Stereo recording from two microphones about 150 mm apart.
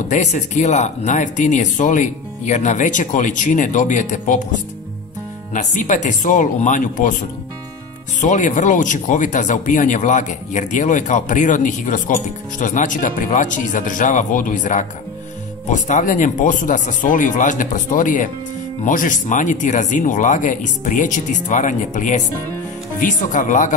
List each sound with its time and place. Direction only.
0.1 s speech: 50° left (ahead or behind)
5.5 s speech: 60° left (ahead or behind)
8.2 s speech: 55° left (ahead or behind)